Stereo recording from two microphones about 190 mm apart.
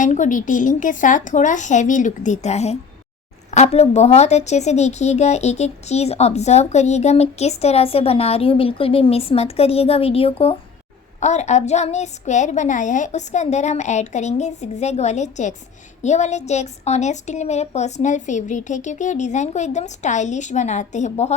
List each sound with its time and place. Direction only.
0.0 s a woman's voice: 40° left (ahead or behind)